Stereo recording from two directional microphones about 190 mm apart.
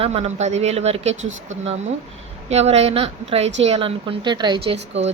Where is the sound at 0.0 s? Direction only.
30° right (ahead or behind).